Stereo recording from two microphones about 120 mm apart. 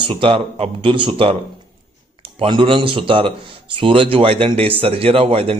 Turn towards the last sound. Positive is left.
turn(degrees=-50)  # may be behind; listen again after turning